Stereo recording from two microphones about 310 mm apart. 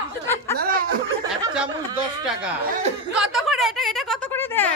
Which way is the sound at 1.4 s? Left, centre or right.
Centre.